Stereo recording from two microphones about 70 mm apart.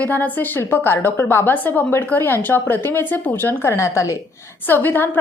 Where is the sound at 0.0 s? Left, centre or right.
Left.